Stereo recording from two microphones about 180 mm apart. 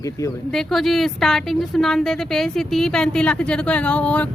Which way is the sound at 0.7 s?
Centre (ahead or behind).